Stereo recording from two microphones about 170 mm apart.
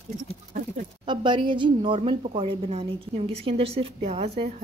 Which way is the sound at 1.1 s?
30° right (ahead or behind).